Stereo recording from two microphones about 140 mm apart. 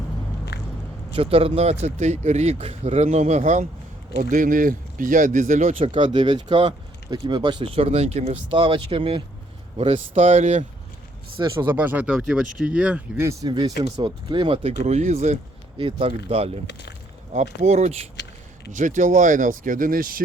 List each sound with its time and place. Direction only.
1.1 s speech: 45° right (ahead or behind); by 5.7 s 60° right (ahead or behind)
5.7 s speech: 40° right (ahead or behind)
11.3 s speech: 30° right (ahead or behind)
11.7 s speech: 15° right (ahead or behind)
13.5 s speech: 35° right (ahead or behind); by 15.4 s 55° right (ahead or behind)
15.8 s speech: 40° right (ahead or behind); by 20.2 s 90° right